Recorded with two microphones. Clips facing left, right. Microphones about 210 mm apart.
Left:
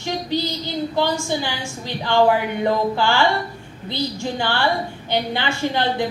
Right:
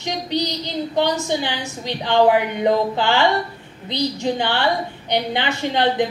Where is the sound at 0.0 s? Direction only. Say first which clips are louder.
Even; 20° right (ahead or behind).